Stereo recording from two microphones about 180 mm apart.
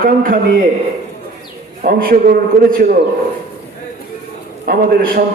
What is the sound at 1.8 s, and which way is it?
Speech, 55° right (ahead or behind).